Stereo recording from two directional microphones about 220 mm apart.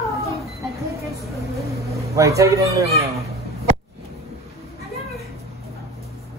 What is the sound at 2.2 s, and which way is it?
Speech, 15° right (ahead or behind).